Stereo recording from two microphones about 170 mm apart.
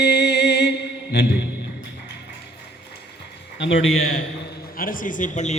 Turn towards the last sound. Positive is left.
turn(degrees=45)  # may be behind; listen again after turning